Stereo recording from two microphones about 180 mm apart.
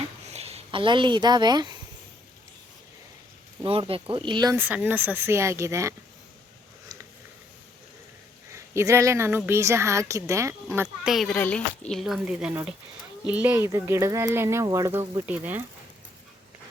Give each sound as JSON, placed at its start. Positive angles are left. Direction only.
{"t": 0.3, "sound": "speech", "side_deg": -35}
{"t": 3.6, "sound": "speech", "side_deg": -30}
{"t": 4.5, "sound": "a woman's voice", "side_deg": -10}
{"t": 8.5, "sound": "a woman's voice", "side_deg": -15}